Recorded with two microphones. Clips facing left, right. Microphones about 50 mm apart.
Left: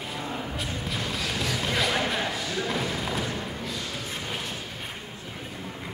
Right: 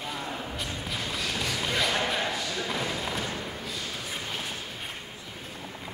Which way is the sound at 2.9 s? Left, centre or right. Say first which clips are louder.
Left 2 dB; centre.